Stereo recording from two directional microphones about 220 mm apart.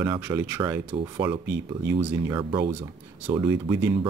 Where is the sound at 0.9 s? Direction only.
20° right (ahead or behind).